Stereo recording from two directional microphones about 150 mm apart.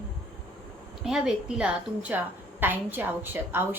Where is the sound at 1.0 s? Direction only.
5° right (ahead or behind).